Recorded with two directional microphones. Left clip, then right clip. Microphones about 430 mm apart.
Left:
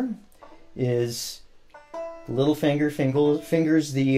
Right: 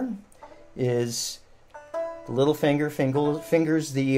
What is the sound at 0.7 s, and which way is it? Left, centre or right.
Speech, left.